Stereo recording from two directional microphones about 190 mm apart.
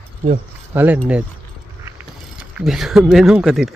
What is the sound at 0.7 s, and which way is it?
Speech, 10° right (ahead or behind).